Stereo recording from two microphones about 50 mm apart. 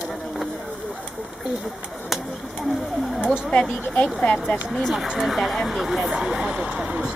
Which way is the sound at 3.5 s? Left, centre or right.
Left.